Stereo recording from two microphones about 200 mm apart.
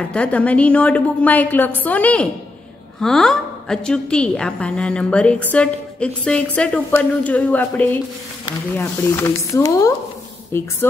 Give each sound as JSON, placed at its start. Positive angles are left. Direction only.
{"t": 0.1, "sound": "a woman's voice", "side_deg": 5}